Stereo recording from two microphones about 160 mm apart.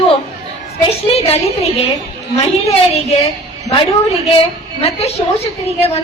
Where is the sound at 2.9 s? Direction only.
40° left (ahead or behind).